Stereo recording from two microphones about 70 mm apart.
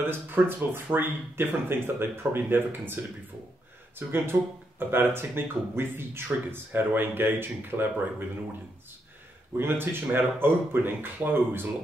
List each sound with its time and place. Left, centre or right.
0.0 s speech: right
4.1 s speech: right
9.6 s speech: right